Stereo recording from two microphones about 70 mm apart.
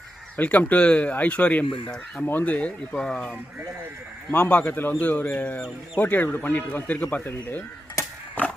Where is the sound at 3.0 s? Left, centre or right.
Centre.